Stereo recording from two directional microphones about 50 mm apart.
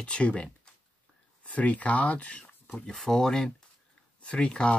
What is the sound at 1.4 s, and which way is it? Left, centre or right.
Speech, left.